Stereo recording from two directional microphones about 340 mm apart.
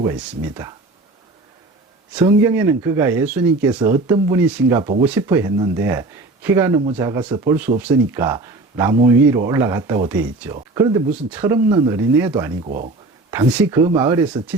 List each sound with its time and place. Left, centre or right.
0.0 s speech: centre
2.1 s speech: centre
4.8 s speech: centre
5.0 s speech: centre
12.6 s speech: right
13.3 s speech: centre